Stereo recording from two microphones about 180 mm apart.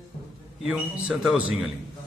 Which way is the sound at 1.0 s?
5° right (ahead or behind).